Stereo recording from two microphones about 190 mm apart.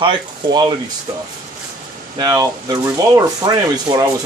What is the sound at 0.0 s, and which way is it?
Speech, 25° right (ahead or behind).